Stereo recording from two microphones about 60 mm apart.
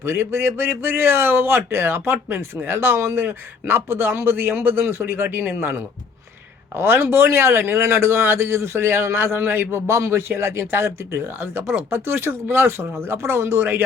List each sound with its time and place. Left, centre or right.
0.0 s speech: right
6.7 s a man's voice: right